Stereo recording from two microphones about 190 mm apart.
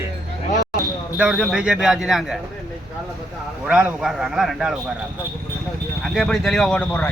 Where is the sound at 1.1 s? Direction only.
5° right (ahead or behind).